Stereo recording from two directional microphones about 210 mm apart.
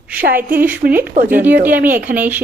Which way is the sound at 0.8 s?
35° right (ahead or behind).